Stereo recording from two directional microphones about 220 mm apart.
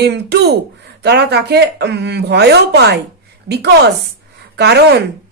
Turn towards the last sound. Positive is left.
turn(degrees=-50)  # may be behind; listen again after turning